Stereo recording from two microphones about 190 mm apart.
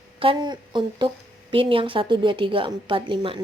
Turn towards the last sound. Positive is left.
turn(degrees=-25)  # may be behind; listen again after turning